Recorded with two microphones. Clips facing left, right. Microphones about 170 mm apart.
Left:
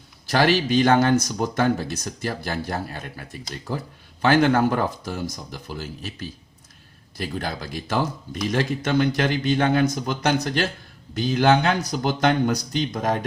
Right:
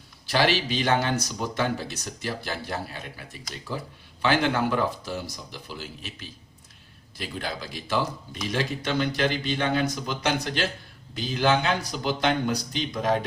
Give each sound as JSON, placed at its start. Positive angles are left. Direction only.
{"t": 0.3, "sound": "speech", "side_deg": 45}